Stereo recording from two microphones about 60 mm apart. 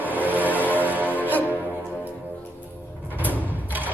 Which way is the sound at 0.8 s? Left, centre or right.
Right.